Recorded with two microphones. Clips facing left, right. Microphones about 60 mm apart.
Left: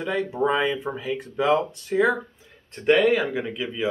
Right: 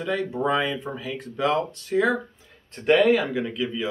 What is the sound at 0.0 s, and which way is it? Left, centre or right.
Speech, centre.